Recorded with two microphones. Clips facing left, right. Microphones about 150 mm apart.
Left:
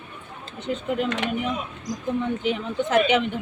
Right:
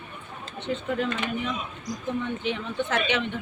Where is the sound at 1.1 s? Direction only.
80° left.